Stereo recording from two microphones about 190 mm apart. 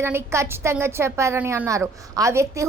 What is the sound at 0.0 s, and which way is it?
A woman's voice, 15° right (ahead or behind).